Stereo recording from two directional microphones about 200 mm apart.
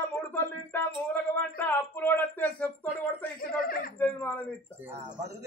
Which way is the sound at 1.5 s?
10° left (ahead or behind).